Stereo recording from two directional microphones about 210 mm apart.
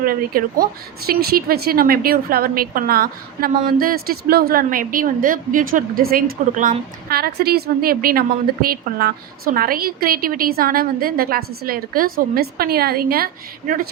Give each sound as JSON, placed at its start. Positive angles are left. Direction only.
{"t": 0.0, "sound": "a woman's voice", "side_deg": -45}